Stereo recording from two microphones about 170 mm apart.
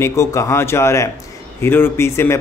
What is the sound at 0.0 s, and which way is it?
A man's voice, 15° left (ahead or behind).